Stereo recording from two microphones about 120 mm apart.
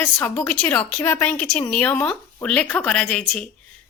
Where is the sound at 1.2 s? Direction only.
10° left (ahead or behind).